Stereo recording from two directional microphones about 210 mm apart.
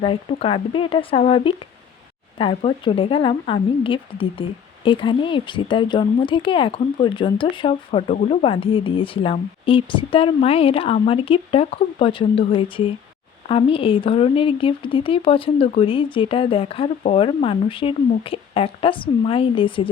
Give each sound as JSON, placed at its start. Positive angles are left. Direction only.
{"t": 0.0, "sound": "a woman's voice", "side_deg": 25}